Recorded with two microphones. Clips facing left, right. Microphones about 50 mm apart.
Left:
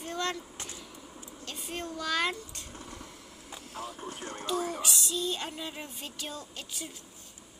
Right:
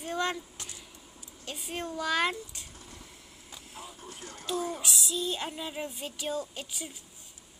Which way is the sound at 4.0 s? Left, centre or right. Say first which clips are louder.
Left 6 dB; left.